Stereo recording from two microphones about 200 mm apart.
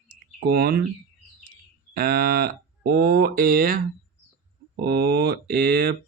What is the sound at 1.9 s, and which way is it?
Speech, 50° right (ahead or behind).